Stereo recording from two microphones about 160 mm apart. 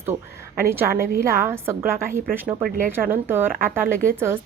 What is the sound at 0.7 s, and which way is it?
A woman's voice, 15° right (ahead or behind).